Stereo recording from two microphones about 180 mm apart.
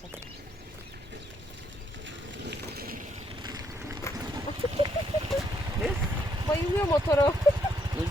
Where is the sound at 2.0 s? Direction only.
65° right (ahead or behind).